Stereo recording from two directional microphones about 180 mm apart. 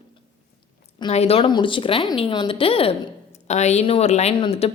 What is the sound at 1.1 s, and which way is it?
Speech, 35° left (ahead or behind).